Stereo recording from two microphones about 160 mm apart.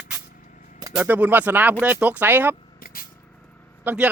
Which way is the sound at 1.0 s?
10° right (ahead or behind).